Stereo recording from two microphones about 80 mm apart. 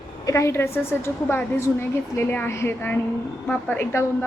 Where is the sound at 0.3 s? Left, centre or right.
Left.